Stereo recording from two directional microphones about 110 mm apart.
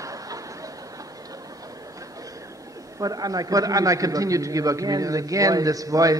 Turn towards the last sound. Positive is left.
turn(degrees=-30)  # may be behind; listen again after turning